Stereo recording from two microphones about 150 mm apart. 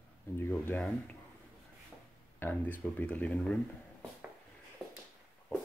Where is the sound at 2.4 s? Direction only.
10° left (ahead or behind).